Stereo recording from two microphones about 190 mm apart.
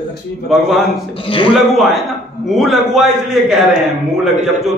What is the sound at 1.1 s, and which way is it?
Speech, 25° left (ahead or behind).